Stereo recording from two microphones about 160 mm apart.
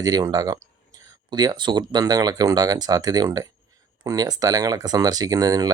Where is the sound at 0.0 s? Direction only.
20° right (ahead or behind).